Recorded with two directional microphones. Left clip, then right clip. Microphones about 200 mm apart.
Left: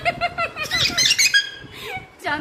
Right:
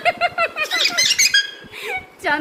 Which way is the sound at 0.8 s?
15° left (ahead or behind).